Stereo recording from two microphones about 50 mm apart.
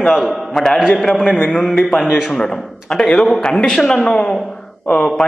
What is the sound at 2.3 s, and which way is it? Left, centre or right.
A man's voice, centre.